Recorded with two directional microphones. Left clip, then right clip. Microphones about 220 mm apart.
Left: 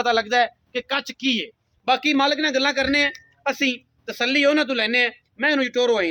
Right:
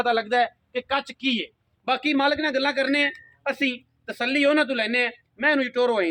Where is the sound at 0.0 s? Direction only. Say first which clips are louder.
Left 2 dB; 50° left (ahead or behind).